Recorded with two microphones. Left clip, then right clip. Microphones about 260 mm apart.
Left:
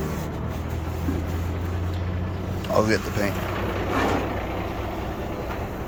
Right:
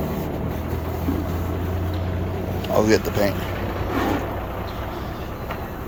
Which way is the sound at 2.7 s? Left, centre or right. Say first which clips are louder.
Right 3 dB; centre.